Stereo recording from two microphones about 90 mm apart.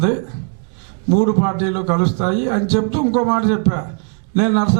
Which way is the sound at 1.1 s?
20° right (ahead or behind).